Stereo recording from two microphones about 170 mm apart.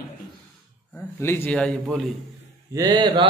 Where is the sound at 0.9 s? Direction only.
15° left (ahead or behind).